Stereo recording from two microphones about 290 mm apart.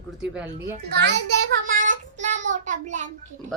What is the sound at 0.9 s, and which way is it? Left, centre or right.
Speech, right.